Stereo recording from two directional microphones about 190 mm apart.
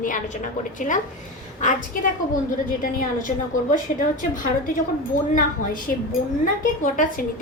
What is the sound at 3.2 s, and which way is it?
Speech, 45° left (ahead or behind).